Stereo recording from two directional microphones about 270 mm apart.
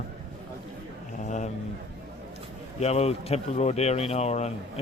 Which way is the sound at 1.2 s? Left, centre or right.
Left.